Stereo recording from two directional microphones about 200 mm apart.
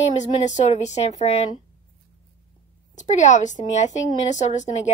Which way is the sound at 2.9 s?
35° left (ahead or behind).